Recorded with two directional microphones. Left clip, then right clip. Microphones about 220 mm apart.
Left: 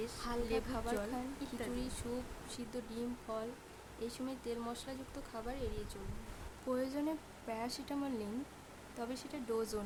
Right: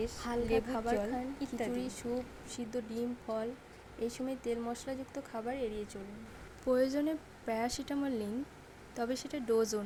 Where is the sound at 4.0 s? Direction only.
10° right (ahead or behind).